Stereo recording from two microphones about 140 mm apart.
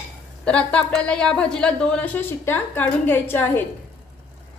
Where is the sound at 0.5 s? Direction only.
10° left (ahead or behind).